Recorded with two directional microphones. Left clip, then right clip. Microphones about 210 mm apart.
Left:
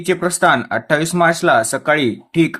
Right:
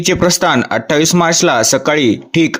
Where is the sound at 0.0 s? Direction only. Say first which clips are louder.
Right 3 dB; 40° right (ahead or behind).